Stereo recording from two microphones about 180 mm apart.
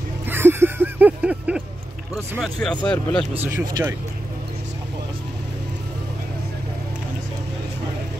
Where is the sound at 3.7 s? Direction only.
15° right (ahead or behind).